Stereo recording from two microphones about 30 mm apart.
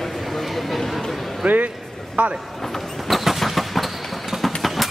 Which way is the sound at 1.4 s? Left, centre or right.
Right.